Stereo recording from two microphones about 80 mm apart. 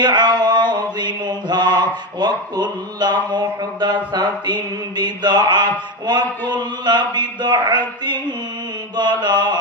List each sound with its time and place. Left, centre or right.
0.0 s mantra: right
2.1 s speech: right
6.5 s a sound: right